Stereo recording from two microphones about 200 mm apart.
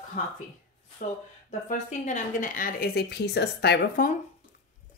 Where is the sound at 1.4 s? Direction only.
35° left (ahead or behind); by 4.0 s 55° left (ahead or behind).